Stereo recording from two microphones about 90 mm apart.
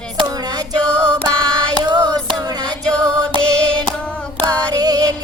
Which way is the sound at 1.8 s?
45° right (ahead or behind).